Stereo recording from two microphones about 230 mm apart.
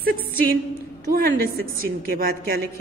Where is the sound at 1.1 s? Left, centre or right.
Right.